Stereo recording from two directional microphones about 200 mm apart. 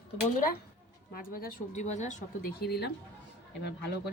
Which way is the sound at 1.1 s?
45° left (ahead or behind).